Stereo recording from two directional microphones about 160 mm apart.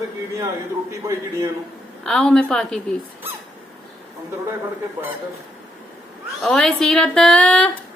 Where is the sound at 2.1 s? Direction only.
5° left (ahead or behind).